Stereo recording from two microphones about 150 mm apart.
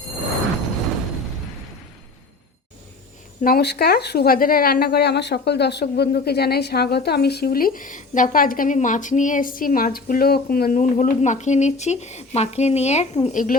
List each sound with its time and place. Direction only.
3.4 s a woman's voice: 90° left; by 10.8 s 75° left (ahead or behind)
10.8 s speech: 55° left (ahead or behind)